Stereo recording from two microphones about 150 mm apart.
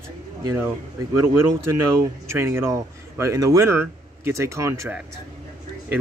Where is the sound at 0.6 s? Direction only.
15° right (ahead or behind).